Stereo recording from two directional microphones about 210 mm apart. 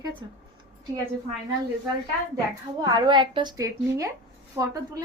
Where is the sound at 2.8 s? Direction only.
20° right (ahead or behind).